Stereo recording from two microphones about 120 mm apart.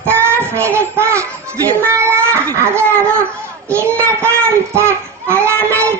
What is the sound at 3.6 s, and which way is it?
Child singing, 20° right (ahead or behind).